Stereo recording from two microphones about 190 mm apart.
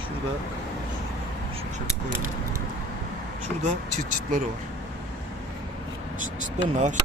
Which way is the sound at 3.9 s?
40° right (ahead or behind).